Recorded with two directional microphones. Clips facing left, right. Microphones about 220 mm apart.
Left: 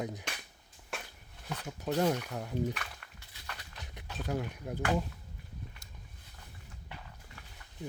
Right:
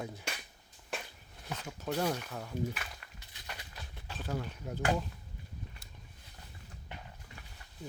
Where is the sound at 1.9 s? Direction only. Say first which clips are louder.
Left 4 dB; 10° left (ahead or behind).